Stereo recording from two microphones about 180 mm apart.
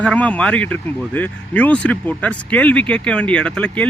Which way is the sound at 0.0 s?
5° left (ahead or behind).